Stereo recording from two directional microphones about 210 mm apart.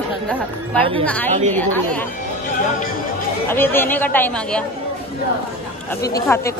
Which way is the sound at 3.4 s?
10° left (ahead or behind).